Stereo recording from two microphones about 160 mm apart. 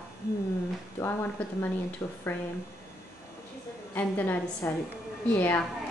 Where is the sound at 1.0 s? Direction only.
15° left (ahead or behind).